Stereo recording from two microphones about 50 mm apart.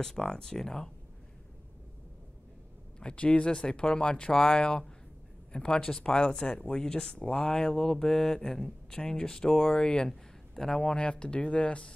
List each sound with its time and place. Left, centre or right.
0.0 s speech: centre
3.0 s a man's voice: left
11.0 s speech: left